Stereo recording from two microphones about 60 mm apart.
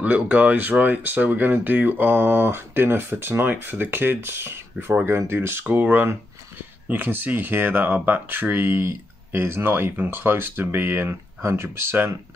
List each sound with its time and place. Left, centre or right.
0.0 s speech: right